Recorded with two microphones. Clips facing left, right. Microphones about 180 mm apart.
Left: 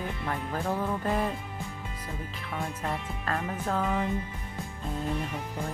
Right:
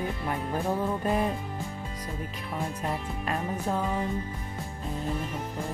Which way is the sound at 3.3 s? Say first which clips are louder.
Right 1 dB; 15° right (ahead or behind).